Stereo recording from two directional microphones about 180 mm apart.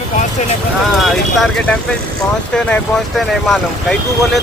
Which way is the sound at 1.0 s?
5° left (ahead or behind).